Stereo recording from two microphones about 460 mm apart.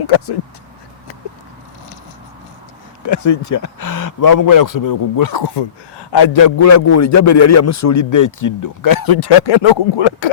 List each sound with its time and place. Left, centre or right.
0.0 s speech: left
3.1 s speech: left